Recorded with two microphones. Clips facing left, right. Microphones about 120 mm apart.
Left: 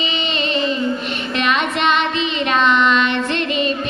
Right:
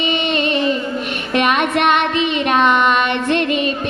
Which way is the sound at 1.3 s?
55° right (ahead or behind).